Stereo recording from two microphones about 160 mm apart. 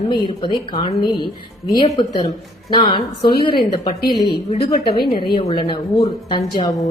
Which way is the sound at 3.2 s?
75° left (ahead or behind).